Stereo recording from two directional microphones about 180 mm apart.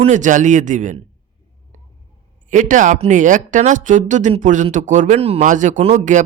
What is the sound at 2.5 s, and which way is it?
Speech, 45° right (ahead or behind).